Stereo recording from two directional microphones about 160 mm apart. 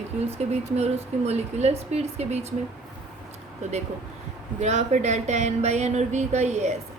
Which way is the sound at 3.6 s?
45° right (ahead or behind).